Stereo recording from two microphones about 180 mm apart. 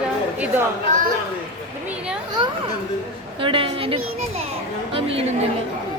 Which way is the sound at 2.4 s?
30° right (ahead or behind).